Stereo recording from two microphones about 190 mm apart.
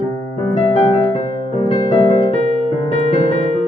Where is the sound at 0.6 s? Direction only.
30° left (ahead or behind).